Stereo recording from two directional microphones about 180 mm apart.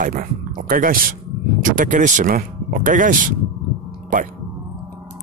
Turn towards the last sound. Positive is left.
turn(degrees=-50)  # may be behind; listen again after turning